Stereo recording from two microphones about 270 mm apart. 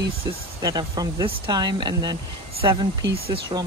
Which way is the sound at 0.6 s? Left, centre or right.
Centre.